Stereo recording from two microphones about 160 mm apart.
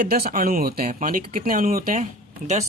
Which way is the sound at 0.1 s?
65° right (ahead or behind).